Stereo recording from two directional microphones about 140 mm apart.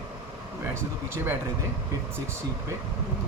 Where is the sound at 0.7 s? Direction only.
20° right (ahead or behind).